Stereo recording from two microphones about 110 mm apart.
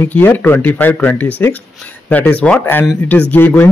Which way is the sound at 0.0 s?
20° left (ahead or behind).